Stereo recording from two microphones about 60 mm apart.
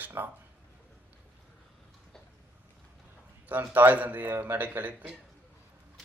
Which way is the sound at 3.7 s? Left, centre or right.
Right.